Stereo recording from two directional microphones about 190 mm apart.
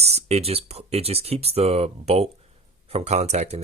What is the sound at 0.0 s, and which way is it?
Speech, 35° right (ahead or behind).